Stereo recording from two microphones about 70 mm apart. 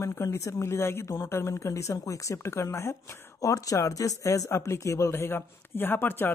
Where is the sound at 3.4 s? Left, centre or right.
Left.